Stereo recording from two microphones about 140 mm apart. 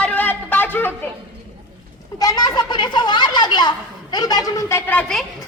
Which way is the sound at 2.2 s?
25° left (ahead or behind).